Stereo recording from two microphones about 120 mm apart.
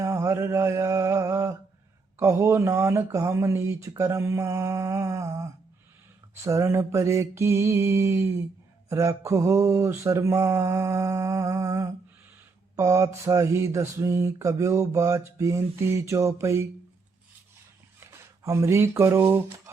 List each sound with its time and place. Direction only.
0.0 s mantra: 25° right (ahead or behind)
18.0 s speech: 25° right (ahead or behind)